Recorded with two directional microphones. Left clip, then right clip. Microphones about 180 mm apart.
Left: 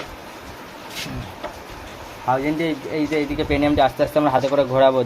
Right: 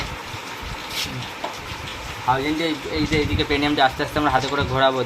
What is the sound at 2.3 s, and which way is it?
Speech, 45° left (ahead or behind).